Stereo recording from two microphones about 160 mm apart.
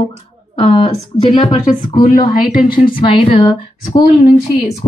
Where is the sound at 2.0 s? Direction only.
60° left (ahead or behind).